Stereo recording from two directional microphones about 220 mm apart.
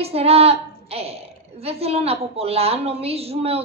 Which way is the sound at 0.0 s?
25° right (ahead or behind).